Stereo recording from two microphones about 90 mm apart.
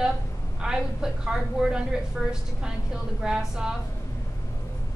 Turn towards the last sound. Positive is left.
turn(degrees=-5)  # may be behind; listen again after turning